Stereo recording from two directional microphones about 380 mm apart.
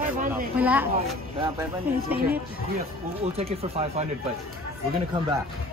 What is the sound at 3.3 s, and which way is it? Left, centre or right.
Speech, centre.